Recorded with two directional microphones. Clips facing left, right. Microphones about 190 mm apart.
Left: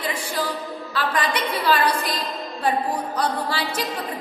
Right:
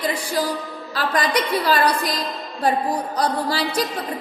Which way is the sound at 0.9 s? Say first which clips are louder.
Right 3 dB; 40° right (ahead or behind).